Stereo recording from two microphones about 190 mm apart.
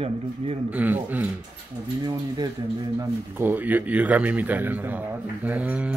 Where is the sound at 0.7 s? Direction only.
10° right (ahead or behind).